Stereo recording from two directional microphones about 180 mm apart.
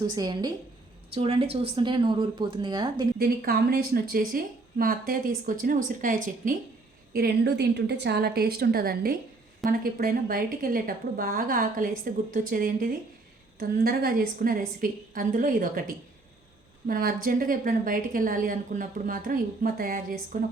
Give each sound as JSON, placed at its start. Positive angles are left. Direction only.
{"t": 0.0, "sound": "speech", "side_deg": -20}
{"t": 1.1, "sound": "speech", "side_deg": -35}
{"t": 3.2, "sound": "a woman's voice", "side_deg": -60}
{"t": 7.1, "sound": "a woman's voice", "side_deg": -60}